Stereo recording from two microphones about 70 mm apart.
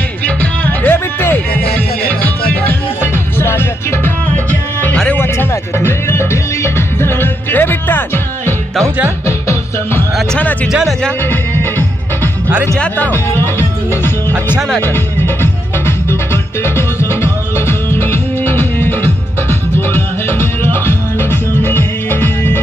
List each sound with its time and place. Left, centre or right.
0.4 s music: left
3.3 s music: left
5.1 s music: left
13.0 s music: left
16.7 s music: left